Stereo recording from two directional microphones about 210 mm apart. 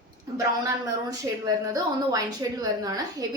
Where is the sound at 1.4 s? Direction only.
15° right (ahead or behind).